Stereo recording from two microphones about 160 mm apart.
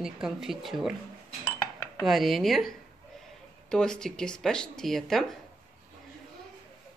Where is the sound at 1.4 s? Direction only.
15° left (ahead or behind).